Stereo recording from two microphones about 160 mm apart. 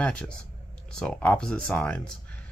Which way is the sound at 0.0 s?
5° left (ahead or behind).